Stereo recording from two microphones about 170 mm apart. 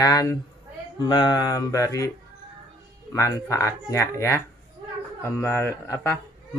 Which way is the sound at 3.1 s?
20° left (ahead or behind).